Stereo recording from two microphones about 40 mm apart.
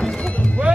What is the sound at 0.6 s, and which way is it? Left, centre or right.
Music, right.